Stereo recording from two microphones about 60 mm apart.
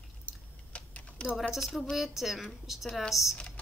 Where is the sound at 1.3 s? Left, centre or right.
Centre.